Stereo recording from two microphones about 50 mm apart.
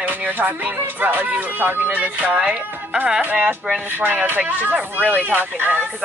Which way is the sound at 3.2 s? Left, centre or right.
Right.